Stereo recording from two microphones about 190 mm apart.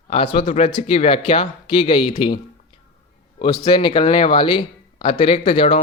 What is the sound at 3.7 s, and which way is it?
Speech, 25° left (ahead or behind).